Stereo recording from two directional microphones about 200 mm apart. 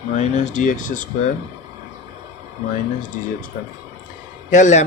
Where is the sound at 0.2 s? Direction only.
40° left (ahead or behind).